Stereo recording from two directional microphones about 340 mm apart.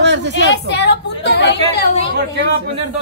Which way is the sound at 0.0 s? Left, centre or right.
Right.